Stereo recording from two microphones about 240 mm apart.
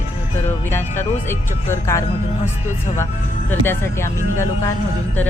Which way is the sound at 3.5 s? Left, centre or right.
Centre.